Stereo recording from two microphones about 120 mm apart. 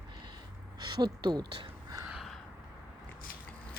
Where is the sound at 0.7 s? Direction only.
35° right (ahead or behind).